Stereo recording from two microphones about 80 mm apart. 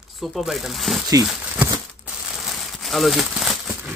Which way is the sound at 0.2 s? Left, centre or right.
Centre.